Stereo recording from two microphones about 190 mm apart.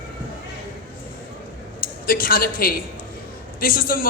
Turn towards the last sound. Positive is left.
turn(degrees=50)  # may be behind; listen again after turning